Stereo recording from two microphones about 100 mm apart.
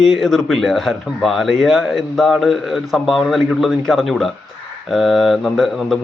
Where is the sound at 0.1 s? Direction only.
Centre (ahead or behind).